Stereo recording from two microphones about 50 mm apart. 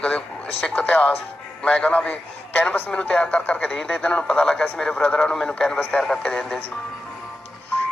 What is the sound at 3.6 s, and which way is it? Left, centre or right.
A man's voice, centre.